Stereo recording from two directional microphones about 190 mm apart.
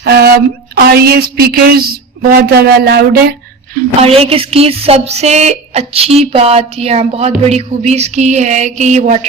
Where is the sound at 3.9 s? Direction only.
30° right (ahead or behind).